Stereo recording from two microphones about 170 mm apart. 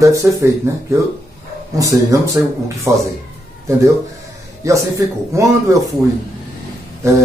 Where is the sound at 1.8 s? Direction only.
20° right (ahead or behind).